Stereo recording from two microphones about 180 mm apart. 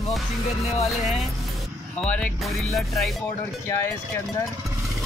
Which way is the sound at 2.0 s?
5° left (ahead or behind).